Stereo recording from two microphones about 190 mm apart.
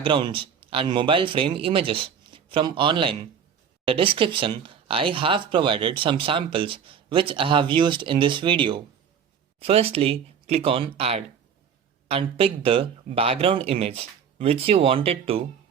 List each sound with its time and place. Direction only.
0.0 s speech: 25° right (ahead or behind)